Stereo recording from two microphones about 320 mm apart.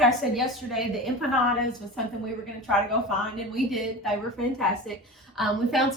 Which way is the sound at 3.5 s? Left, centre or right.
Centre.